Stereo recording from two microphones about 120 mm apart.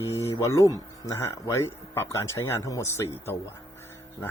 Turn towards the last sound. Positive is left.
turn(degrees=20)  # may be behind; listen again after turning